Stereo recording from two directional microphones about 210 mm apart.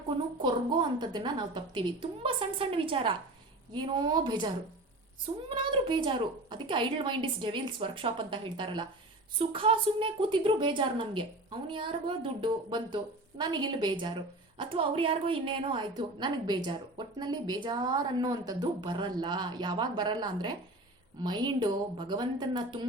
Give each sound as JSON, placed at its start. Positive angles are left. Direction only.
{"t": 0.4, "sound": "a woman's voice", "side_deg": -20}